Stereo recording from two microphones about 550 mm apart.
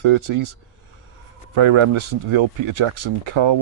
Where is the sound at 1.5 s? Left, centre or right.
Right.